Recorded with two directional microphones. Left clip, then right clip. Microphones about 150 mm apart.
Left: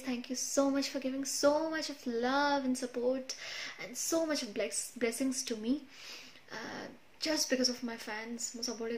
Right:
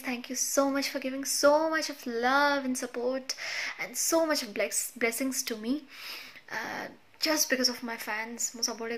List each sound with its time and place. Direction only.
0.0 s speech: 30° left (ahead or behind)